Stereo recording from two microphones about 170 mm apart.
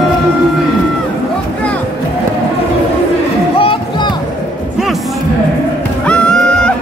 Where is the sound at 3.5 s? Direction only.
30° left (ahead or behind).